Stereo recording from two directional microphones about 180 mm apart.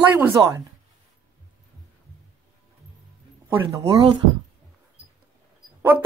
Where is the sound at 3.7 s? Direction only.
20° right (ahead or behind).